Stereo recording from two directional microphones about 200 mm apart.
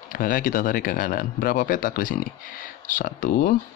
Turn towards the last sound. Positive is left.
turn(degrees=40)  # may be behind; listen again after turning